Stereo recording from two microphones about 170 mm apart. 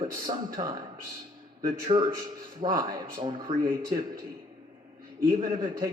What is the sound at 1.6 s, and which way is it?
A man's voice, 25° right (ahead or behind).